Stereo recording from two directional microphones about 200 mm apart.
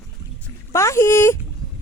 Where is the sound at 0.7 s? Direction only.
15° left (ahead or behind).